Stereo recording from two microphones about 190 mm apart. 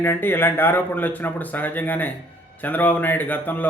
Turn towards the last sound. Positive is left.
turn(degrees=10)  # may be behind; listen again after turning